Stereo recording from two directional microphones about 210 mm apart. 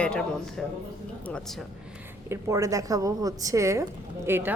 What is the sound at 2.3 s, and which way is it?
A woman's voice, 15° right (ahead or behind).